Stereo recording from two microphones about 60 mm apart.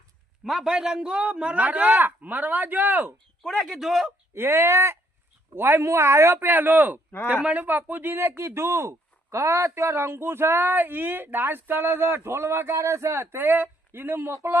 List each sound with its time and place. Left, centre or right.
0.4 s speech: centre; by 3.1 s right
3.6 s speech: centre
4.4 s speech: right
6.4 s speech: right
12.7 s speech: right